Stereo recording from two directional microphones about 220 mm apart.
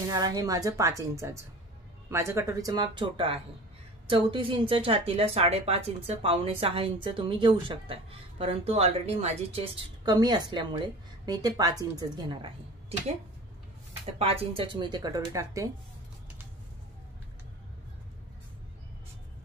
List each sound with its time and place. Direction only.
0.1 s a woman's voice: 15° right (ahead or behind)
14.1 s a woman's voice: 25° right (ahead or behind)